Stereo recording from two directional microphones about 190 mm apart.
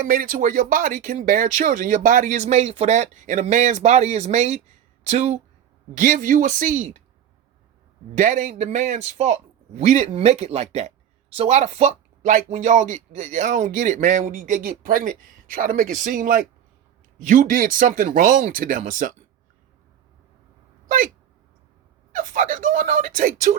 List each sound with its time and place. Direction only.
0.0 s speech: 50° right (ahead or behind)
8.1 s speech: 40° right (ahead or behind)
20.8 s a sound: 45° right (ahead or behind)
22.1 s speech: 45° right (ahead or behind)